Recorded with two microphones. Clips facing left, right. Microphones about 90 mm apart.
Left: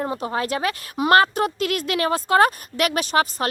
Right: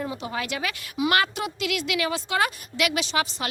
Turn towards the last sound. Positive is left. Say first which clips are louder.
# left 6 dB
turn(degrees=45)  # may be behind; listen again after turning